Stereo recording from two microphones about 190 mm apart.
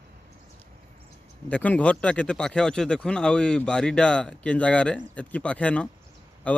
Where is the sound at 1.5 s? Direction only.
5° left (ahead or behind).